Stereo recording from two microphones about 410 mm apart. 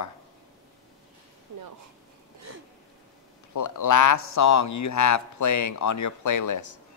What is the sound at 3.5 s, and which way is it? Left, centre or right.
Speech, left.